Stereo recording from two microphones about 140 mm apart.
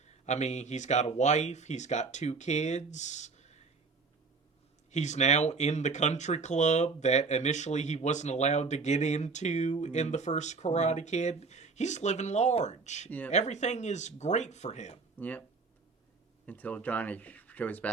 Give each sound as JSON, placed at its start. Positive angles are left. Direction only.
{"t": 0.0, "sound": "speech", "side_deg": 55}
{"t": 4.9, "sound": "speech", "side_deg": 55}
{"t": 13.1, "sound": "speech", "side_deg": 10}
{"t": 13.3, "sound": "speech", "side_deg": 55}
{"t": 15.2, "sound": "speech", "side_deg": 10}
{"t": 16.5, "sound": "speech", "side_deg": 10}